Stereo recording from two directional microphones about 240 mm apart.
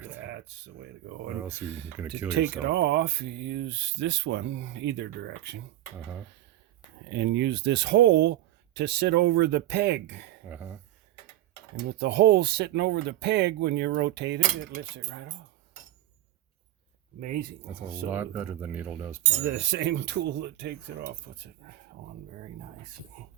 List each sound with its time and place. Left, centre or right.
1.4 s speech: centre
2.6 s speech: right
7.1 s speech: right
10.4 s speech: centre
11.9 s speech: right
17.2 s speech: right
18.1 s speech: centre
19.5 s speech: right